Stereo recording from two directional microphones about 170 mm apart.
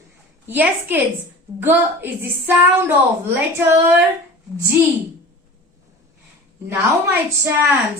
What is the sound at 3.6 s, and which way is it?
Speech, 15° right (ahead or behind).